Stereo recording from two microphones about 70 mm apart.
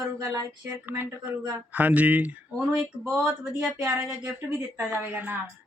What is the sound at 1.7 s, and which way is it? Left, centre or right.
Speech, right.